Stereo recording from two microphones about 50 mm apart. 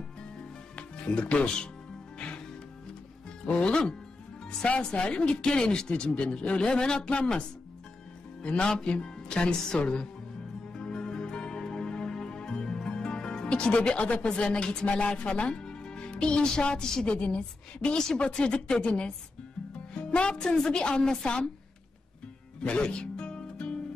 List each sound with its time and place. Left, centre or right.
0.7 s speech: left
2.1 s music: left
3.4 s speech: left
10.7 s music: centre
18.0 s a woman's voice: centre
22.6 s music: left